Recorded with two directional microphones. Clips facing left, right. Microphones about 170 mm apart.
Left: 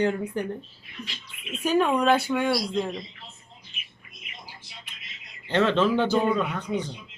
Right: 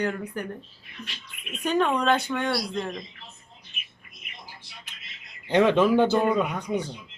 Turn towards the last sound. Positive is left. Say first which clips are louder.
# right 1 dB
turn(degrees=-10)  # may be behind; listen again after turning